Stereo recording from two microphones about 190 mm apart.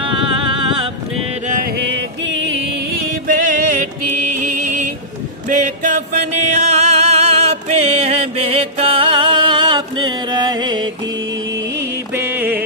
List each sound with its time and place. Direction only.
0.0 s vehicle: 25° right (ahead or behind)
1.8 s music: 70° right (ahead or behind)
3.3 s music: 45° right (ahead or behind)
5.5 s a sound: 40° right (ahead or behind)
6.5 s music: 35° right (ahead or behind)
12.2 s music: 10° right (ahead or behind)